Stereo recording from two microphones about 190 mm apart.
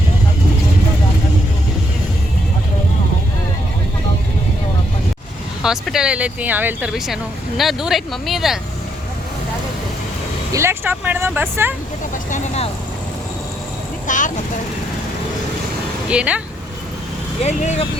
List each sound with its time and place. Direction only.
5.6 s speech: centre (ahead or behind)
10.5 s speech: 15° right (ahead or behind)
12.1 s speech: 40° left (ahead or behind)
14.1 s vehicle: 45° left (ahead or behind)
16.0 s speech: 5° right (ahead or behind)
17.4 s speech: 35° left (ahead or behind)